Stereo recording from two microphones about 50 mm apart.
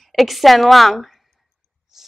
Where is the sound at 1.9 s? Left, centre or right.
Centre.